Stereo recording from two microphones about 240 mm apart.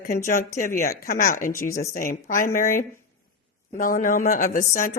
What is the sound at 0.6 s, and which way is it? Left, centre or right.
A woman's voice, left.